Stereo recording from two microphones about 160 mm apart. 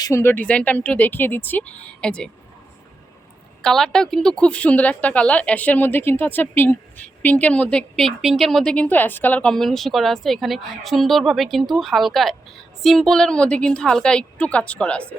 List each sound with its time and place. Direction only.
0.0 s speech: 15° left (ahead or behind)
3.6 s a woman's voice: centre (ahead or behind)